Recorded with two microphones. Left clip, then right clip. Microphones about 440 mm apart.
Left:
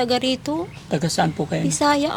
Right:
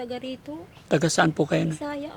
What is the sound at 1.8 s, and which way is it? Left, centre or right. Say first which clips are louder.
Speech: left 14 dB; left.